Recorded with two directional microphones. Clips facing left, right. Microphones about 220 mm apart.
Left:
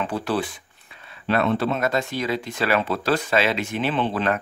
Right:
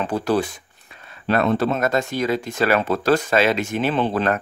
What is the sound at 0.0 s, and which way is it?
Speech, 40° right (ahead or behind).